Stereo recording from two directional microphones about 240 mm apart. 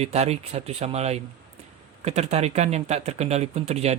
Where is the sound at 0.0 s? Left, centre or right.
Right.